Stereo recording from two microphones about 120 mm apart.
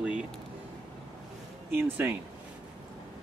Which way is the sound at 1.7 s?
15° right (ahead or behind).